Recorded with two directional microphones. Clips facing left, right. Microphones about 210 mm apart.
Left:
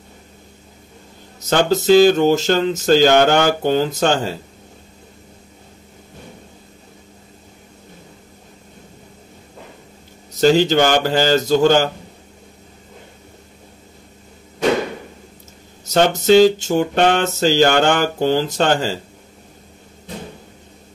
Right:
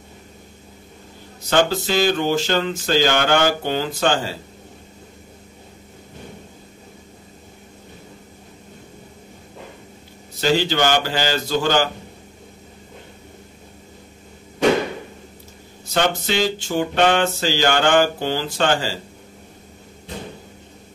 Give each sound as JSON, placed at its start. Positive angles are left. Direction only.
{"t": 1.5, "sound": "music", "side_deg": 45}
{"t": 10.4, "sound": "music", "side_deg": 45}
{"t": 15.9, "sound": "music", "side_deg": 45}